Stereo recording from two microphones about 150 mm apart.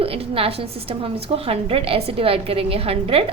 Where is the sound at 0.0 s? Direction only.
40° right (ahead or behind).